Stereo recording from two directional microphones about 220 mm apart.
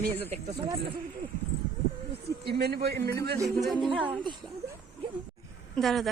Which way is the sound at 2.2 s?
45° right (ahead or behind).